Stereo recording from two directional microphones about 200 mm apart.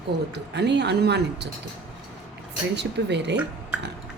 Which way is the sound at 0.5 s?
60° right (ahead or behind).